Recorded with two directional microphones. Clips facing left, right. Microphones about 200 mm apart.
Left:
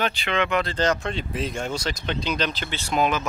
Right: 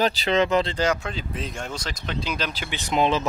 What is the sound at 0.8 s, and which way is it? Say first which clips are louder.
Speech: left 1 dB; 10° right (ahead or behind).